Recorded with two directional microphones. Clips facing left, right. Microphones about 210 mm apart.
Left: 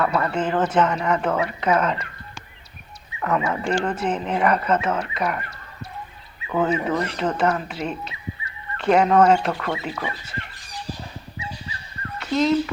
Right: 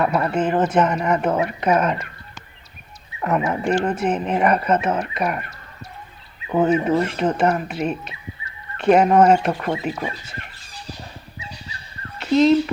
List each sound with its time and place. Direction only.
0.0 s speech: 15° right (ahead or behind)
3.2 s speech: 20° right (ahead or behind)
6.5 s speech: 20° right (ahead or behind)
12.2 s speech: 25° right (ahead or behind)